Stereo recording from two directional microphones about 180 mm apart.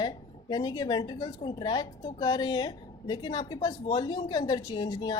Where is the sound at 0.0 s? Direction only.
25° left (ahead or behind).